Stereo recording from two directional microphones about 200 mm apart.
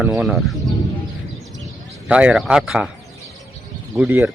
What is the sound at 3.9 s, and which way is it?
Speech, 10° right (ahead or behind).